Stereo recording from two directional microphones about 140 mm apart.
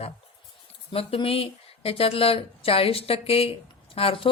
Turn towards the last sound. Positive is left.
turn(degrees=40)  # may be behind; listen again after turning